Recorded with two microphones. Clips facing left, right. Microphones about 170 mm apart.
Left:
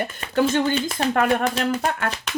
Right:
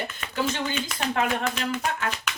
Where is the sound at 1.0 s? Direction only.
35° left (ahead or behind).